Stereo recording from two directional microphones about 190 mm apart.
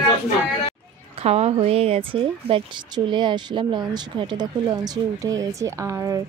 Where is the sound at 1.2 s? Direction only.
35° right (ahead or behind); by 6.2 s 15° right (ahead or behind).